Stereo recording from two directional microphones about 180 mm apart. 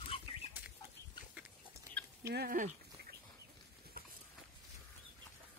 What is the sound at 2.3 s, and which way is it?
Speech, 55° right (ahead or behind).